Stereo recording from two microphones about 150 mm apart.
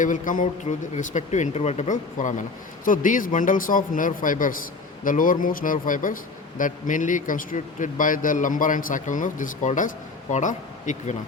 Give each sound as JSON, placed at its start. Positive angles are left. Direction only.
{"t": 0.0, "sound": "a man's voice", "side_deg": 60}